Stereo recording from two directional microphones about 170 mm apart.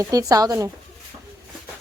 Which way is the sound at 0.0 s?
20° right (ahead or behind).